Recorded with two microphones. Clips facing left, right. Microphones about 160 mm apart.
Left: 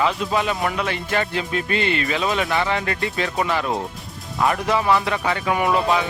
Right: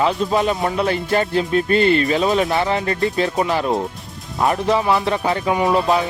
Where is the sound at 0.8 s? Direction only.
40° right (ahead or behind).